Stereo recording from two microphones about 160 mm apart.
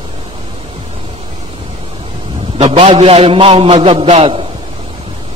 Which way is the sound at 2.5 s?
40° right (ahead or behind).